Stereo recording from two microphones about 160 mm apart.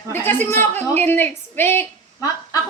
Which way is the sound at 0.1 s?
15° left (ahead or behind).